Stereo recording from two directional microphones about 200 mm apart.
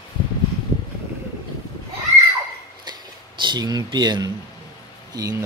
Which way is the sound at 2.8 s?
20° right (ahead or behind).